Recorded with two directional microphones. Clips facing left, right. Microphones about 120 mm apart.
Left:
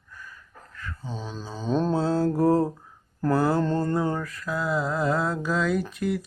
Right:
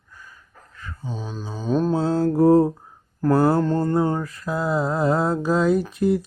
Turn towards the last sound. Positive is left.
turn(degrees=-30)  # may be behind; listen again after turning